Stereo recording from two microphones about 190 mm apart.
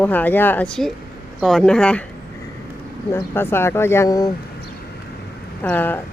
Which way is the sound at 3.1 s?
10° left (ahead or behind).